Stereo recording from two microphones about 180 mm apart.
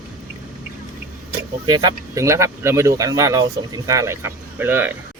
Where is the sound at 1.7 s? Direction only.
20° right (ahead or behind).